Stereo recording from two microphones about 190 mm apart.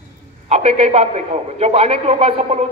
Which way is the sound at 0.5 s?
30° right (ahead or behind).